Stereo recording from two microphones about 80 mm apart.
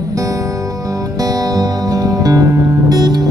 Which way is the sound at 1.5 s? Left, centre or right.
Right.